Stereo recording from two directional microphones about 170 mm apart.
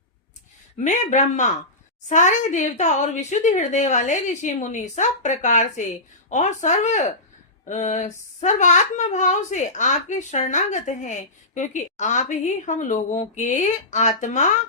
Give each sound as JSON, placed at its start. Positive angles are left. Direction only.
{"t": 0.9, "sound": "speech", "side_deg": 45}